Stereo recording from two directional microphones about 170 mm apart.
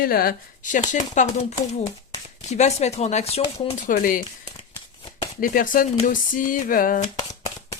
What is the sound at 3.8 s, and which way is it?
Speech, 55° left (ahead or behind).